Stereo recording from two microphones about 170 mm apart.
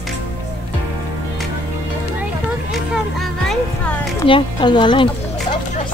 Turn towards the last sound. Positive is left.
turn(degrees=25)  # may be behind; listen again after turning